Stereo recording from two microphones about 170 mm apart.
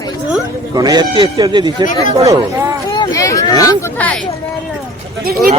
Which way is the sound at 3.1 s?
20° left (ahead or behind).